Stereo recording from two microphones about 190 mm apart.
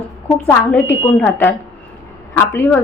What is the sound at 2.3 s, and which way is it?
Speech, 10° left (ahead or behind).